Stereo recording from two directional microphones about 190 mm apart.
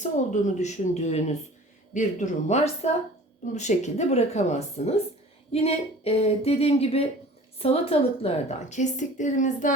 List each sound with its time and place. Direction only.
0.0 s a woman's voice: 40° left (ahead or behind)